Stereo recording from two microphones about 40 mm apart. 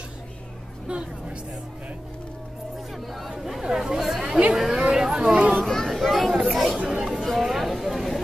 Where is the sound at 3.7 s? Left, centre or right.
Centre.